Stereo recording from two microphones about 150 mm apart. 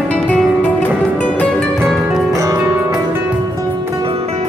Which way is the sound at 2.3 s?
20° right (ahead or behind).